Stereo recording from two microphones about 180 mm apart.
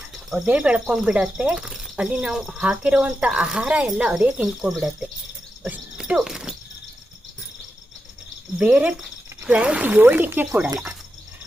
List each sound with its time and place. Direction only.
0.3 s speech: 5° right (ahead or behind)
5.6 s a sound: 5° right (ahead or behind)
8.5 s speech: 5° right (ahead or behind)